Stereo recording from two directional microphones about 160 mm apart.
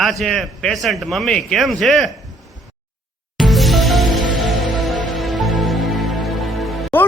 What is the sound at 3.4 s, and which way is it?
Music, centre (ahead or behind).